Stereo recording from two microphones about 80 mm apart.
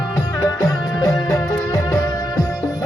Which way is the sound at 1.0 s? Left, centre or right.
Left.